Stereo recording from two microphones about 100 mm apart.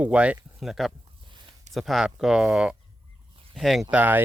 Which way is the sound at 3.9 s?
15° right (ahead or behind).